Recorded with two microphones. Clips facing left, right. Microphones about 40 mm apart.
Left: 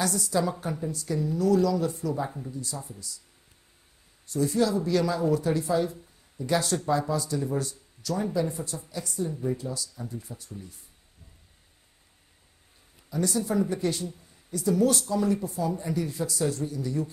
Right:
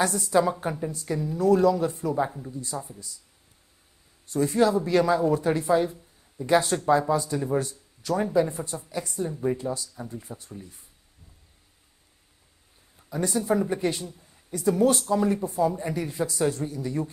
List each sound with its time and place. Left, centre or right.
0.0 s speech: right
4.3 s a woman's voice: right
13.1 s speech: right